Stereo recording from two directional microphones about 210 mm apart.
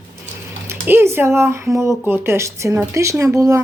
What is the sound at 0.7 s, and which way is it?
Speech, 10° right (ahead or behind).